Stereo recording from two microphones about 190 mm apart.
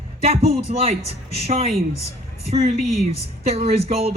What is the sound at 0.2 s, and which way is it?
A woman's voice, 35° right (ahead or behind).